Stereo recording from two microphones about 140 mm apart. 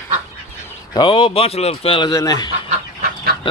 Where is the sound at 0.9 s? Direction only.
35° left (ahead or behind).